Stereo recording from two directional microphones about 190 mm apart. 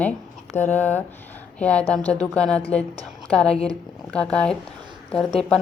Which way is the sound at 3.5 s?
30° left (ahead or behind).